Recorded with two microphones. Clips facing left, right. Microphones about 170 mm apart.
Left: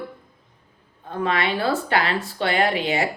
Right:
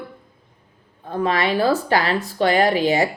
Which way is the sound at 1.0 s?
35° right (ahead or behind).